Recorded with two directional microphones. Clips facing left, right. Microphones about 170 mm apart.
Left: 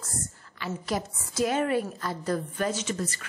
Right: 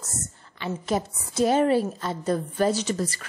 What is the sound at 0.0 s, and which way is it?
A woman's voice, 20° right (ahead or behind).